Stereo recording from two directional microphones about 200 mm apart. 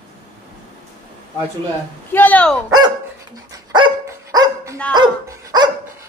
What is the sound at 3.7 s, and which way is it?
Dog, 20° right (ahead or behind).